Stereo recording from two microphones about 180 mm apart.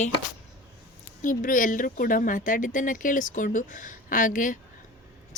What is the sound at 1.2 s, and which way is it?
Speech, 45° left (ahead or behind).